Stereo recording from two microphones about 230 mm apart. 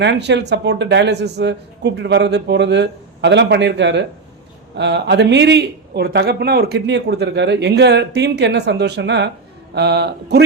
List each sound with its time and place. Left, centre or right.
0.0 s speech: right